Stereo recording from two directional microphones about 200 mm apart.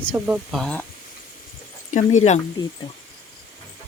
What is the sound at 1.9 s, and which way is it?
Speech, 35° left (ahead or behind).